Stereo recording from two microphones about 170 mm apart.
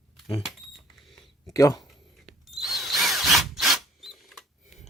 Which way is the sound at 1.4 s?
20° left (ahead or behind).